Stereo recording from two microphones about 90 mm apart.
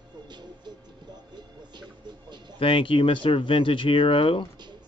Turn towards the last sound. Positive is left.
turn(degrees=85)